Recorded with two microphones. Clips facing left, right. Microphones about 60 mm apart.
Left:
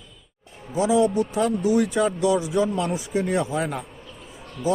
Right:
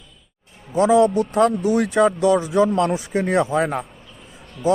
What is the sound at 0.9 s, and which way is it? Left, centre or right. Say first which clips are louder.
A man's voice: right 4 dB; right.